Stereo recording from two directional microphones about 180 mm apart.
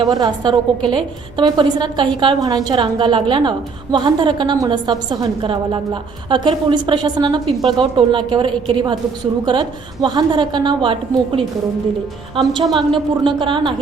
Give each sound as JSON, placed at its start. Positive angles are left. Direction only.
{"t": 0.0, "sound": "a woman's voice", "side_deg": -25}